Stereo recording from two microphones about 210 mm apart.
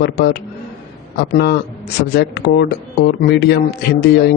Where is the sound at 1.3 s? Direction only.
50° left (ahead or behind).